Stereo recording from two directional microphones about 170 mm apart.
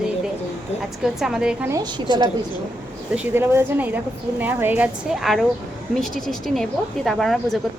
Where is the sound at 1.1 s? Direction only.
5° right (ahead or behind).